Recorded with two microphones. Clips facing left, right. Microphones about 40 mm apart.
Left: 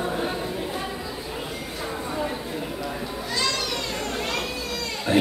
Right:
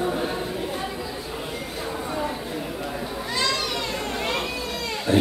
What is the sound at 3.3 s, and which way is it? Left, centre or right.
Children playing, centre.